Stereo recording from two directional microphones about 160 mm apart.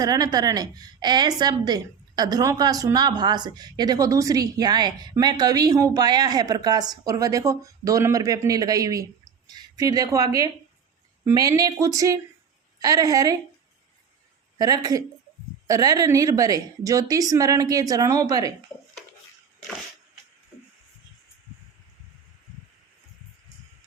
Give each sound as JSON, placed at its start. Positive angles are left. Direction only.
{"t": 0.0, "sound": "a woman's voice", "side_deg": -25}
{"t": 15.6, "sound": "a woman's voice", "side_deg": -25}